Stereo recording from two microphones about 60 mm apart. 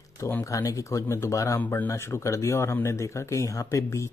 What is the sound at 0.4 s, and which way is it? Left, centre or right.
Speech, left.